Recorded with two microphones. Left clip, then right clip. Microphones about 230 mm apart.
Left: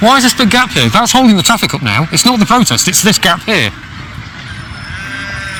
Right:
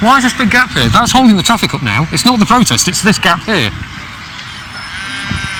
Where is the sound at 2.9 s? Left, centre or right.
Left.